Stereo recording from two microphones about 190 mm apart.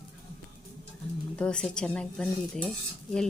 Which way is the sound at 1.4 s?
5° left (ahead or behind).